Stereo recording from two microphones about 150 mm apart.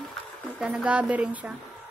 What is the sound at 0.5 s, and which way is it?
Speech, 5° right (ahead or behind).